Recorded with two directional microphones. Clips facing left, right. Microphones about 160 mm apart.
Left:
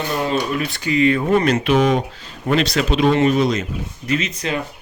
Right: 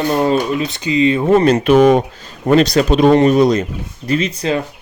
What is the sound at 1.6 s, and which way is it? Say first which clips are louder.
Speech: right 7 dB; 50° right (ahead or behind).